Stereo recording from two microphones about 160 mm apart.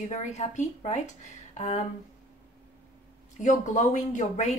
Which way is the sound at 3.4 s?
50° left (ahead or behind).